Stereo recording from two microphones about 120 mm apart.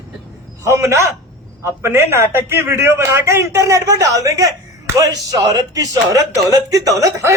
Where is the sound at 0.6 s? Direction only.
25° right (ahead or behind).